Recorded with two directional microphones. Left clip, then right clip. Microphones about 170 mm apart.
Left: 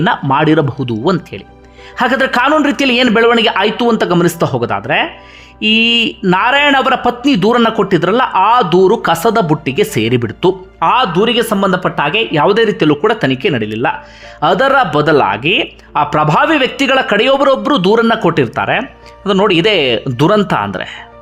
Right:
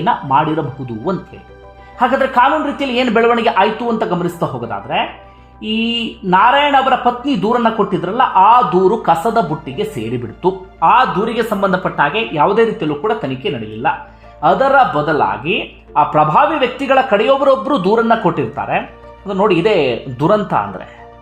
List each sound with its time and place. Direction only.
0.0 s a man's voice: 40° left (ahead or behind)
2.0 s a man's voice: 30° left (ahead or behind)
3.2 s a man's voice: 25° left (ahead or behind)